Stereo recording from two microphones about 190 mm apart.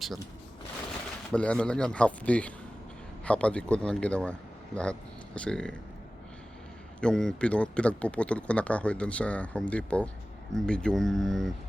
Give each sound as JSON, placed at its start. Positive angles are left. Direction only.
{"t": 1.3, "sound": "speech", "side_deg": 5}
{"t": 7.0, "sound": "speech", "side_deg": 5}